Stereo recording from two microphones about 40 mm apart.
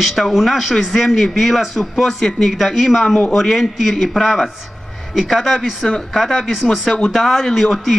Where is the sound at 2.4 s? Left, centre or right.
Centre.